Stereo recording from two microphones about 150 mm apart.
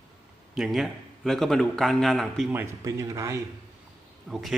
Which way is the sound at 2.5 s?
20° right (ahead or behind).